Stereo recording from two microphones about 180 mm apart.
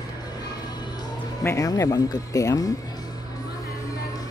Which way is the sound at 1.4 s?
20° left (ahead or behind).